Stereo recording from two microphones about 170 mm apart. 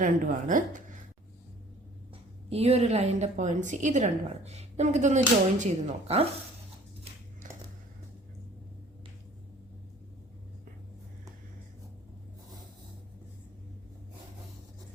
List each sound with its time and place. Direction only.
0.0 s a woman's voice: 50° right (ahead or behind)
2.5 s a woman's voice: 40° right (ahead or behind)